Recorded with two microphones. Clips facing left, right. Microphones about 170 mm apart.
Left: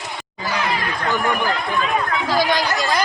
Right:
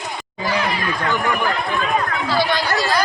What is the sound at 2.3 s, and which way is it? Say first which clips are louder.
Speech: even; 15° left (ahead or behind).